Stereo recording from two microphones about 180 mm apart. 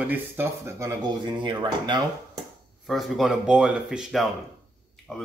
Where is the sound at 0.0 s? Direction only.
10° right (ahead or behind).